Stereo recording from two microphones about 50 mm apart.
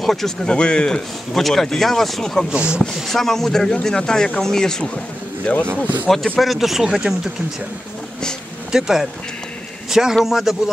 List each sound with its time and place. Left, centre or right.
0.0 s speech: centre
0.5 s speech: centre
2.5 s speech: right
3.1 s speech: centre
5.5 s speech: left
6.0 s speech: centre
8.7 s speech: centre